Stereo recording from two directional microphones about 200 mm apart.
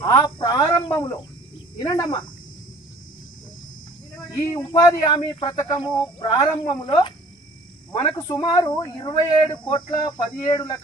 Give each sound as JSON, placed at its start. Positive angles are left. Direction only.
{"t": 0.2, "sound": "speech", "side_deg": 20}
{"t": 4.3, "sound": "speech", "side_deg": 20}
{"t": 8.3, "sound": "speech", "side_deg": 20}